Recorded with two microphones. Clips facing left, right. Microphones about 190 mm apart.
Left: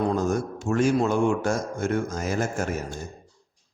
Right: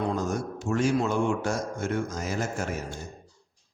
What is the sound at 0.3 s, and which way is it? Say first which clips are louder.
A man's voice: left 4 dB; 50° left (ahead or behind).